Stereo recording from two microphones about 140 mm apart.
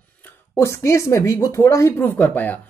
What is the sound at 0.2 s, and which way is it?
Speech, 20° left (ahead or behind).